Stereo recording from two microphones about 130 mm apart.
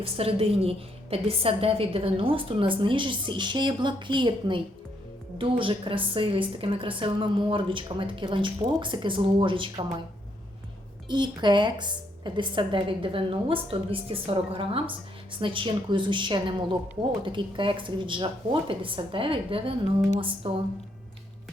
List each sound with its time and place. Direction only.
0.0 s a woman's voice: 45° right (ahead or behind)
11.1 s a woman's voice: 35° right (ahead or behind)